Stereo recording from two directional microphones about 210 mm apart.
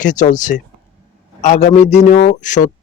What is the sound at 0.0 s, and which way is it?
A man's voice, 35° left (ahead or behind).